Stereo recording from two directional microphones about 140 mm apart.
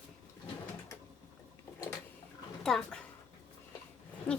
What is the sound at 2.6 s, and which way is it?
Speech, centre (ahead or behind).